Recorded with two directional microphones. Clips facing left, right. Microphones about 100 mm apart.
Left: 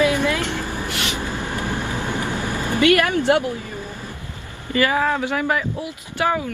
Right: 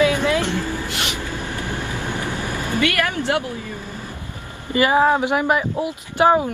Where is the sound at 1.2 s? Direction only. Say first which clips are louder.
Left 2 dB; 20° left (ahead or behind).